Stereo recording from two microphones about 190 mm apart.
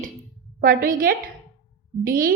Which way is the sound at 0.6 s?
50° right (ahead or behind).